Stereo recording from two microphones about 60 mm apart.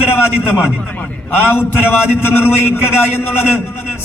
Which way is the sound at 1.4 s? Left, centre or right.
Left.